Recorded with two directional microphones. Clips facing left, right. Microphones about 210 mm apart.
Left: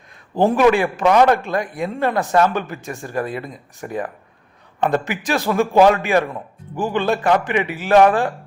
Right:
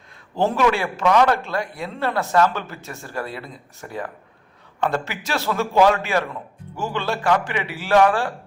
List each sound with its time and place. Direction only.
0.3 s a man's voice: 15° left (ahead or behind)